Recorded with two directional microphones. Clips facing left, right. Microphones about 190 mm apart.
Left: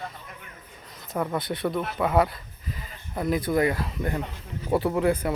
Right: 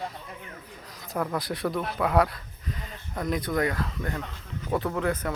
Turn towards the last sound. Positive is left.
turn(degrees=15)  # may be behind; listen again after turning